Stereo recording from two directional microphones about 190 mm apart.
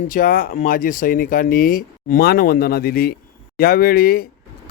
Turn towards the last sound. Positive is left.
turn(degrees=50)  # may be behind; listen again after turning